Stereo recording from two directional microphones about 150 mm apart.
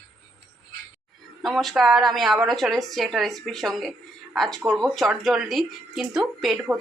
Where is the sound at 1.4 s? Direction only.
Centre (ahead or behind).